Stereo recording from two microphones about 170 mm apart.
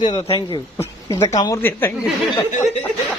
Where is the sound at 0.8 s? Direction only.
20° left (ahead or behind).